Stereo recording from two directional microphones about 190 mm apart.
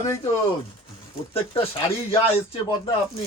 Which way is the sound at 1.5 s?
30° left (ahead or behind).